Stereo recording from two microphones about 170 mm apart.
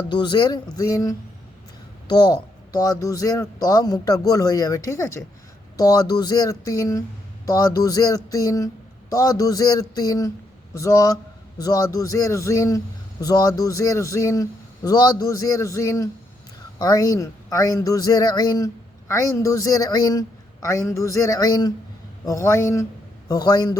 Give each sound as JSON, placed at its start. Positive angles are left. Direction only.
{"t": 0.1, "sound": "speech", "side_deg": 25}